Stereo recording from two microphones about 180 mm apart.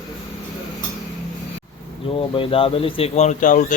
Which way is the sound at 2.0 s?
30° left (ahead or behind).